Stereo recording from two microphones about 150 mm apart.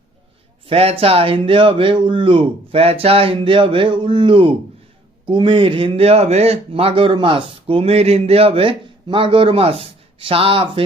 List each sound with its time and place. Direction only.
0.7 s speech: 40° right (ahead or behind)